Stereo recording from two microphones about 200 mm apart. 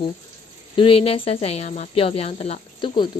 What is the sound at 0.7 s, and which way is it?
Speech, 25° left (ahead or behind).